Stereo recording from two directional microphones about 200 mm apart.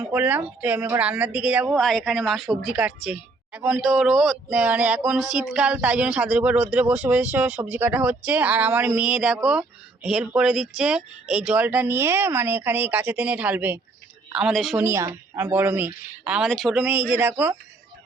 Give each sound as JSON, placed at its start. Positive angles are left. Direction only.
{"t": 0.0, "sound": "speech", "side_deg": -10}
{"t": 14.8, "sound": "speech", "side_deg": -15}